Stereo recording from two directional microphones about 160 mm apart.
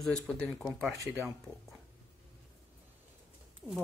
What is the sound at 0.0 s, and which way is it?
Speech, 5° left (ahead or behind).